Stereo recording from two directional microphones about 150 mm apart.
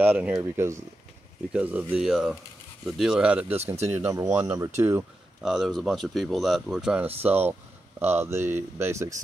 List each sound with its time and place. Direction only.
0.0 s speech: 15° right (ahead or behind)
3.5 s speech: 45° right (ahead or behind)
3.9 s speech: 15° right (ahead or behind)
5.4 s speech: centre (ahead or behind); by 9.1 s 15° right (ahead or behind)